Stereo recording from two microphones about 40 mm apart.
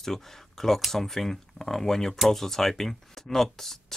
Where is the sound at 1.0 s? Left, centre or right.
Centre.